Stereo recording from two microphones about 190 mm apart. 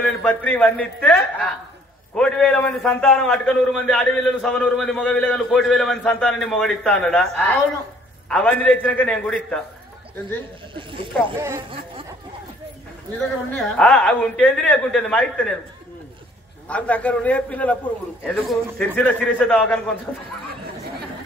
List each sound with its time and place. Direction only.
0.0 s a man's voice: 5° left (ahead or behind)
10.7 s speech: 25° right (ahead or behind)
13.5 s a man's voice: 5° left (ahead or behind)
16.6 s a man's voice: 5° left (ahead or behind)